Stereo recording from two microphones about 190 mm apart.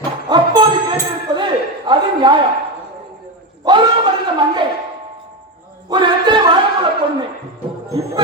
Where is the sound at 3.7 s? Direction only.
25° right (ahead or behind).